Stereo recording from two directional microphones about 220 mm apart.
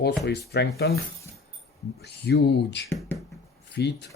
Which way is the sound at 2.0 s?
50° left (ahead or behind).